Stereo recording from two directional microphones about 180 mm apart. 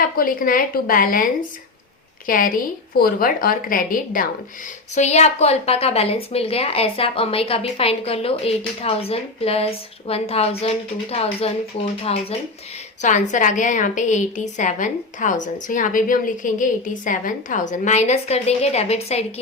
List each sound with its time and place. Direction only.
0.2 s a woman's voice: 50° left (ahead or behind)
4.9 s a woman's voice: 40° left (ahead or behind)